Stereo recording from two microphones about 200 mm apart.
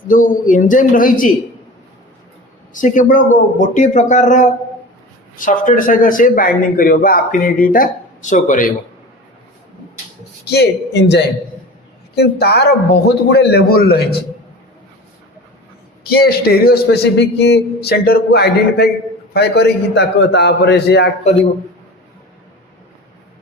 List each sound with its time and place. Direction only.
0.1 s speech: 40° left (ahead or behind)
2.8 s a man's voice: 40° left (ahead or behind)
10.4 s a man's voice: 55° left (ahead or behind)
16.0 s a man's voice: 50° left (ahead or behind)